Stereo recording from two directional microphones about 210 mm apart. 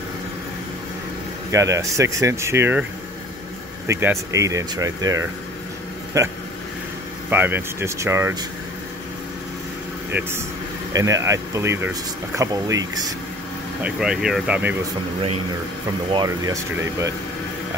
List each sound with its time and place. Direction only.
1.5 s speech: 15° right (ahead or behind)
3.8 s speech: 15° right (ahead or behind)
10.9 s speech: 15° right (ahead or behind)
13.8 s speech: 5° right (ahead or behind)
16.1 s speech: 20° right (ahead or behind)